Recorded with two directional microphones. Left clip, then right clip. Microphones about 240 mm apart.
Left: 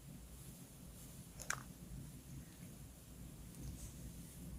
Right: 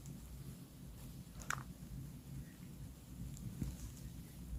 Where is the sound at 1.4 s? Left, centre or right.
Left.